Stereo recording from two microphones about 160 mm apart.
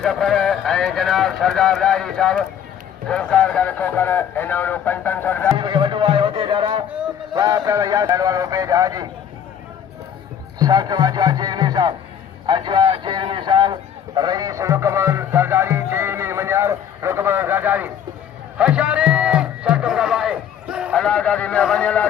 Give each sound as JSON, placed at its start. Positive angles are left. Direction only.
{"t": 0.0, "sound": "speech", "side_deg": 0}
{"t": 5.5, "sound": "speech", "side_deg": -30}
{"t": 10.6, "sound": "speech", "side_deg": -25}
{"t": 18.5, "sound": "music", "side_deg": -5}